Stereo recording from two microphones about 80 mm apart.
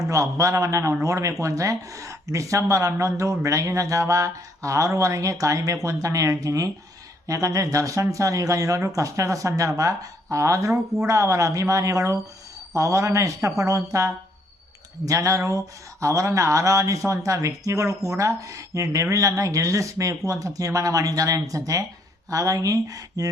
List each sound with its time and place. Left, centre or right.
0.1 s speech: right